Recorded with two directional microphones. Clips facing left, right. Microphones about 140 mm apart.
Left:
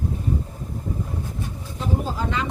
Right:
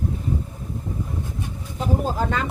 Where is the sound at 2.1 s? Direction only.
45° right (ahead or behind).